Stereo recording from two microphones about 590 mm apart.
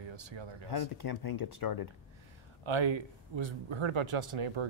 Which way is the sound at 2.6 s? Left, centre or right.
Right.